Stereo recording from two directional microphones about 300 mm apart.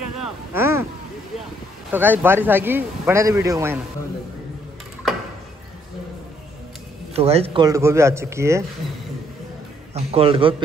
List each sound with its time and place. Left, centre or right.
0.2 s a sound: centre
1.9 s speech: centre
7.2 s speech: centre
9.9 s a man's voice: centre